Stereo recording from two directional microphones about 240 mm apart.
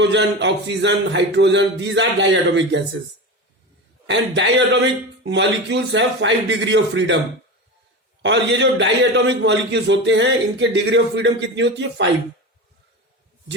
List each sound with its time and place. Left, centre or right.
0.0 s a man's voice: right
4.0 s a man's voice: right
8.2 s a man's voice: right